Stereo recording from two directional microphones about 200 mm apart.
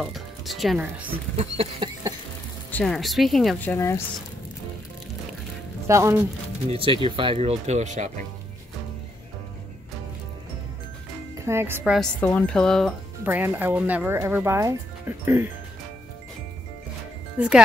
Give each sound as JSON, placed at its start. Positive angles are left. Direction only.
{"t": 0.0, "sound": "speech", "side_deg": 0}
{"t": 1.3, "sound": "speech", "side_deg": -30}
{"t": 2.7, "sound": "a woman's voice", "side_deg": 0}
{"t": 5.9, "sound": "speech", "side_deg": -15}
{"t": 6.7, "sound": "speech", "side_deg": -25}
{"t": 11.3, "sound": "speech", "side_deg": -15}
{"t": 12.2, "sound": "a woman's voice", "side_deg": 5}
{"t": 13.2, "sound": "speech", "side_deg": -10}
{"t": 17.4, "sound": "a woman's voice", "side_deg": -5}